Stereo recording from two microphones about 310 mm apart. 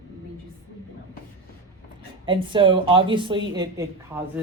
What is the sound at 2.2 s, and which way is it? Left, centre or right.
A woman's voice, centre.